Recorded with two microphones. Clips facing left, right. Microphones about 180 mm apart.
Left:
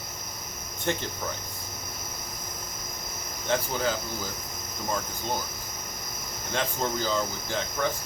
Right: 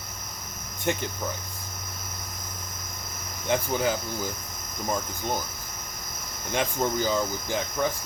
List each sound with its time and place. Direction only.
0.9 s speech: 15° right (ahead or behind)
3.5 s speech: 15° right (ahead or behind)
6.5 s speech: 15° right (ahead or behind)